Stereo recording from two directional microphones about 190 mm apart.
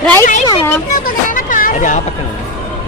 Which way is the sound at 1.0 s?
45° left (ahead or behind).